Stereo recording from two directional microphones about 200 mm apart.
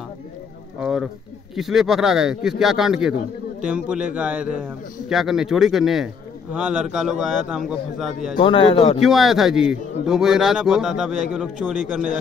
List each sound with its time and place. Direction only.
0.7 s a man's voice: 5° right (ahead or behind)
8.4 s a man's voice: 25° left (ahead or behind)
9.0 s a man's voice: centre (ahead or behind)